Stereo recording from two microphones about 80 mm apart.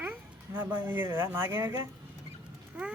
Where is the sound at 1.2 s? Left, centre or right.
Right.